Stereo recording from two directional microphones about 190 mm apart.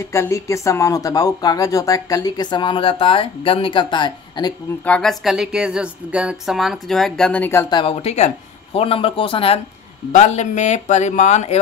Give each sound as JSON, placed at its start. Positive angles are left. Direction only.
{"t": 0.1, "sound": "speech", "side_deg": 15}
{"t": 4.8, "sound": "speech", "side_deg": 5}
{"t": 7.7, "sound": "speech", "side_deg": 30}